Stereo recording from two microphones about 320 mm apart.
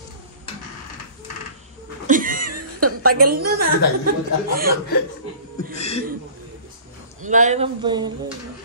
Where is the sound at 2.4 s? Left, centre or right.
Right.